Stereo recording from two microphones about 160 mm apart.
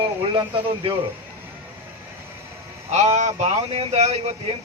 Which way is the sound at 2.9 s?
45° right (ahead or behind).